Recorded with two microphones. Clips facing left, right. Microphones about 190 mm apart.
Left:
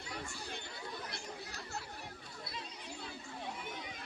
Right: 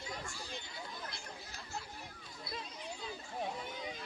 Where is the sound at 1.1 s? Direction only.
65° left (ahead or behind).